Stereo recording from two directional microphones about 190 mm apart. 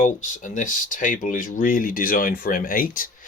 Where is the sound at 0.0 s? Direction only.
40° left (ahead or behind).